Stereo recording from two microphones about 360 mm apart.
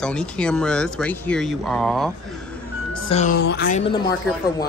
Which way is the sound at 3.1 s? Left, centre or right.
Centre.